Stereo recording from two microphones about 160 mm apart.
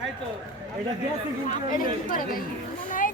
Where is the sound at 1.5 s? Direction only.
60° left (ahead or behind).